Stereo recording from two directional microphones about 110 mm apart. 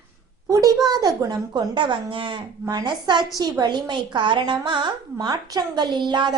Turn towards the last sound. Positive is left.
turn(degrees=-45)  # may be behind; listen again after turning